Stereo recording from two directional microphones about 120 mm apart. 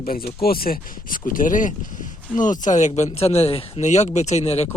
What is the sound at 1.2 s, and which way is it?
Speech, 90° left.